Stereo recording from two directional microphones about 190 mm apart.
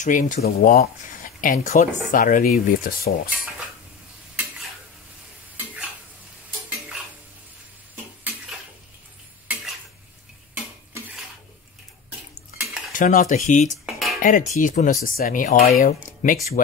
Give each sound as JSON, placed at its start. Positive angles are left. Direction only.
{"t": 0.0, "sound": "speech", "side_deg": 45}
{"t": 7.9, "sound": "dishes", "side_deg": -10}
{"t": 12.9, "sound": "speech", "side_deg": 45}
{"t": 13.8, "sound": "music", "side_deg": 0}
{"t": 14.2, "sound": "speech", "side_deg": 40}